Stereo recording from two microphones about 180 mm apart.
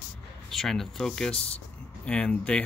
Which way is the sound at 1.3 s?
35° left (ahead or behind).